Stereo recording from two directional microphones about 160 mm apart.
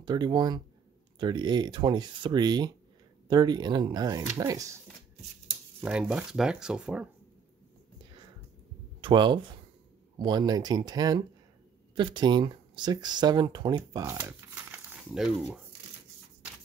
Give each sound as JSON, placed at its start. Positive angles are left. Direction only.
{"t": 0.0, "sound": "speech", "side_deg": -25}
{"t": 5.8, "sound": "speech", "side_deg": -5}
{"t": 9.0, "sound": "speech", "side_deg": -30}